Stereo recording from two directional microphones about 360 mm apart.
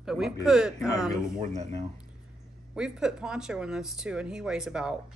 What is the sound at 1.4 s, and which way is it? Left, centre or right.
Speech, centre.